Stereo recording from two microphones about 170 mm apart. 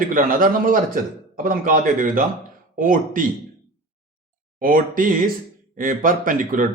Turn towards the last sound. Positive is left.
turn(degrees=-55)  # may be behind; listen again after turning